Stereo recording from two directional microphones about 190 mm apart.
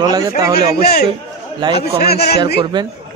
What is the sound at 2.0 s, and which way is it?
Speech, 55° left (ahead or behind).